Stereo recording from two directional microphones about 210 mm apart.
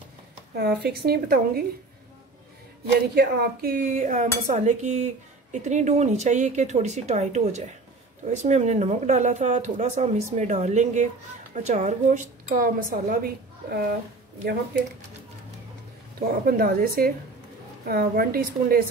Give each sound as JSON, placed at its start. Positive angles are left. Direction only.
{"t": 0.6, "sound": "a woman's voice", "side_deg": -50}
{"t": 3.2, "sound": "dishes", "side_deg": -45}
{"t": 16.4, "sound": "a woman's voice", "side_deg": -45}